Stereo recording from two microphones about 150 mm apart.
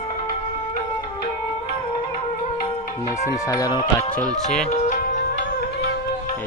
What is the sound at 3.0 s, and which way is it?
Speech, 20° left (ahead or behind).